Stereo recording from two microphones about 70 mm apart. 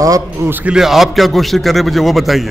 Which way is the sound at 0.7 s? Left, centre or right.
Centre.